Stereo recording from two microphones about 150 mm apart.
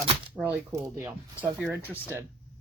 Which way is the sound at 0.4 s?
25° right (ahead or behind).